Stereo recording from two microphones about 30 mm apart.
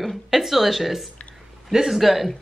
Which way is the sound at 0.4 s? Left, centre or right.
Centre.